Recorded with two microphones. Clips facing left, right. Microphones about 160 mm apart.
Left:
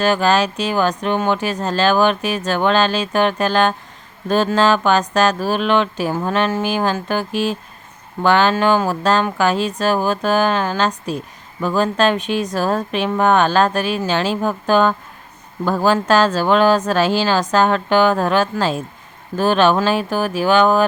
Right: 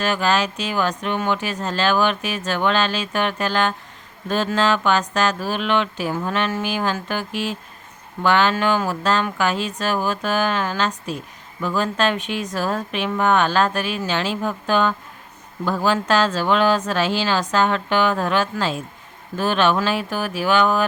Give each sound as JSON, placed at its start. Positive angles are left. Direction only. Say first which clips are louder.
{"t": 0.0, "sound": "speech", "louder": "left 5 dB", "side_deg": 35}